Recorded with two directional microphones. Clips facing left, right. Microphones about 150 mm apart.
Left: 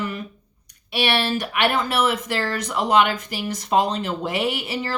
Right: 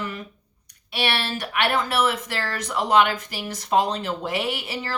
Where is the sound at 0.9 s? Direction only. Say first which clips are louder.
Left 4 dB; 15° left (ahead or behind).